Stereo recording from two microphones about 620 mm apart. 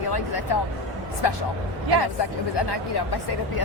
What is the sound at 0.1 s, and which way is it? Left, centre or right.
Speech, left.